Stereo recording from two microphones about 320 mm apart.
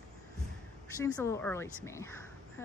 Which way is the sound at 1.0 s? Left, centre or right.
Centre.